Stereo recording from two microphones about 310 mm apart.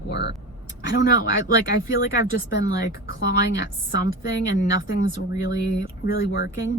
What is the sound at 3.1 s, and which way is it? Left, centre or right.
Speech, left.